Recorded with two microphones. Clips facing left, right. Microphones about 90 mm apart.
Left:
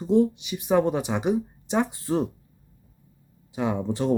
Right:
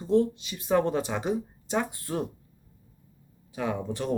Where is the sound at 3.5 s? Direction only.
20° left (ahead or behind).